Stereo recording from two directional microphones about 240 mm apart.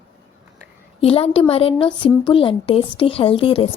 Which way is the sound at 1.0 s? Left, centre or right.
Left.